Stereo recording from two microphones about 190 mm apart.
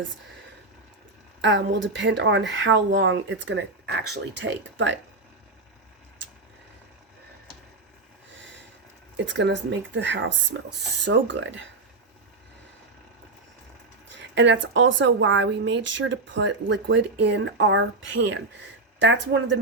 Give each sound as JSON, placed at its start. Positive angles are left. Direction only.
{"t": 1.4, "sound": "speech", "side_deg": -70}
{"t": 9.1, "sound": "speech", "side_deg": -75}
{"t": 14.1, "sound": "speech", "side_deg": -70}